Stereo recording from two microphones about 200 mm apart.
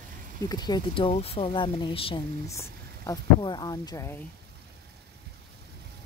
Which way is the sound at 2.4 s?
15° left (ahead or behind).